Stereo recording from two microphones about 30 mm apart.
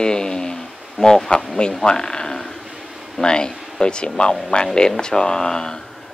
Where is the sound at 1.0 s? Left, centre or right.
Centre.